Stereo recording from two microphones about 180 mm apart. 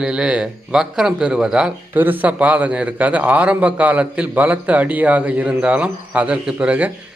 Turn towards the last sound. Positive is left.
turn(degrees=-5)  # may be behind; listen again after turning